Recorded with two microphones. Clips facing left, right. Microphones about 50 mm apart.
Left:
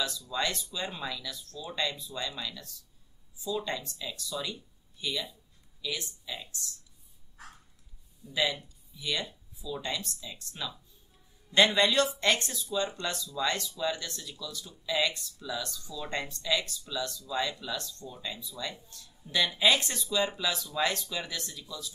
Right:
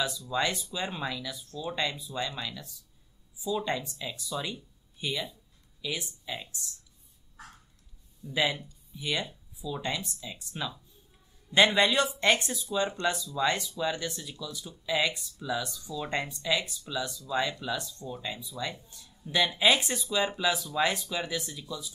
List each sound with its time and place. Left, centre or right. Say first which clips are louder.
0.3 s speech: right 3 dB; centre
8.3 s speech: right 2 dB; right